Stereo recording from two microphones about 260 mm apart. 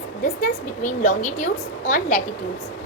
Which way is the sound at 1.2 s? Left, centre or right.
Left.